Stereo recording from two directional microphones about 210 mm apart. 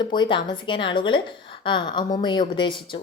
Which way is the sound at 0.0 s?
20° left (ahead or behind).